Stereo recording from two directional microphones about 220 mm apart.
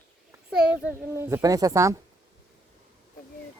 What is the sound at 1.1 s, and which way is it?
Speech, 10° right (ahead or behind).